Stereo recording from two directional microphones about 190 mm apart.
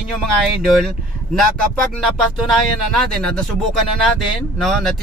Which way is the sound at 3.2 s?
5° left (ahead or behind).